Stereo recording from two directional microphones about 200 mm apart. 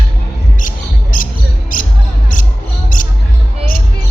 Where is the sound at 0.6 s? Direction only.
40° left (ahead or behind).